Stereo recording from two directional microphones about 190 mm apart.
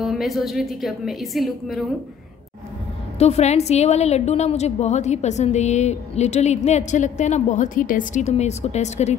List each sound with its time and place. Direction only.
0.0 s a woman's voice: centre (ahead or behind)
3.2 s a woman's voice: 35° left (ahead or behind)